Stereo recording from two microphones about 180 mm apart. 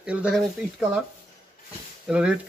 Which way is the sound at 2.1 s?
5° right (ahead or behind).